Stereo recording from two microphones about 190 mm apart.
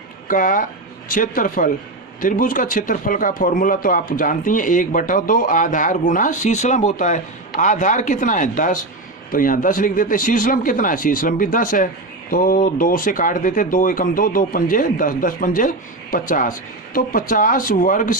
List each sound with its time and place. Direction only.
0.3 s speech: 45° left (ahead or behind)